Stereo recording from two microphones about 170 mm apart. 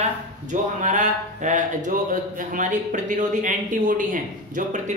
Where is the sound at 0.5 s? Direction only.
45° right (ahead or behind).